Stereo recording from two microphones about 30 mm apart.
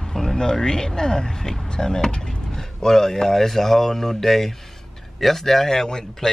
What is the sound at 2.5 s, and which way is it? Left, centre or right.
Speech, centre.